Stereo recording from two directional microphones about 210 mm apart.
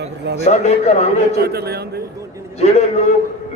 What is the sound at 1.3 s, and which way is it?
Speech, 50° right (ahead or behind).